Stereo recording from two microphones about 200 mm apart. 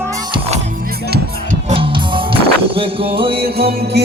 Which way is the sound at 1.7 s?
25° right (ahead or behind).